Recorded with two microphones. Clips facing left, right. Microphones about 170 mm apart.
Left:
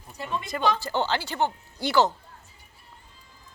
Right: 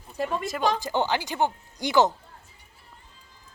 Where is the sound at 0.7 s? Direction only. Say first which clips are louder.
Right 1 dB; 15° right (ahead or behind).